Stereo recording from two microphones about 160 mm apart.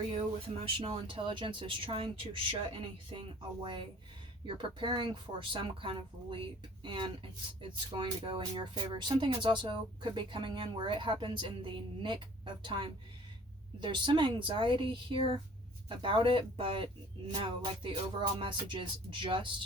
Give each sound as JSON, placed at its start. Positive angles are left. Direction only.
{"t": 0.4, "sound": "speech", "side_deg": -30}